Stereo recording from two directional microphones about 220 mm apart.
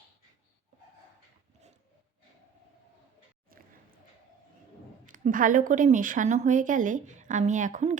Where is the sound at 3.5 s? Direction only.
40° right (ahead or behind).